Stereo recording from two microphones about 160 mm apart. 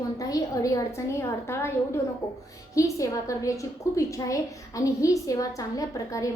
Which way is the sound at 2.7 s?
20° left (ahead or behind).